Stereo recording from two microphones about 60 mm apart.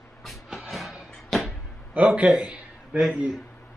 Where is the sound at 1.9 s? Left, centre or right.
Right.